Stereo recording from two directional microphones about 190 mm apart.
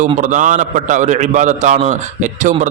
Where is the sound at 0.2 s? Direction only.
40° right (ahead or behind).